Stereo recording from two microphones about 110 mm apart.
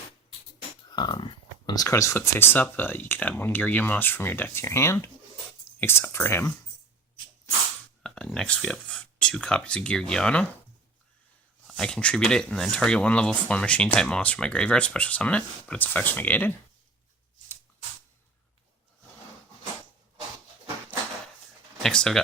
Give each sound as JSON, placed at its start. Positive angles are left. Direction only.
{"t": 0.9, "sound": "a sound", "side_deg": 40}
{"t": 1.9, "sound": "speech", "side_deg": 25}
{"t": 8.0, "sound": "speech", "side_deg": 5}
{"t": 11.7, "sound": "speech", "side_deg": 10}
{"t": 21.8, "sound": "speech", "side_deg": 5}